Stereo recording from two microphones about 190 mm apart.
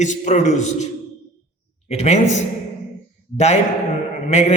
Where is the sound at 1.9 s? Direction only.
35° left (ahead or behind).